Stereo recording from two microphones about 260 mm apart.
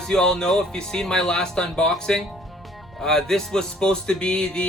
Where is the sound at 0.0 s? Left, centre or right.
Centre.